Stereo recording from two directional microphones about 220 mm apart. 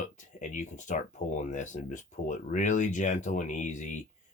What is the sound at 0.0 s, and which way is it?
Speech, 35° left (ahead or behind).